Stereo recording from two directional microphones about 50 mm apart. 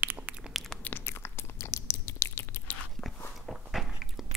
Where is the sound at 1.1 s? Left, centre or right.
Left.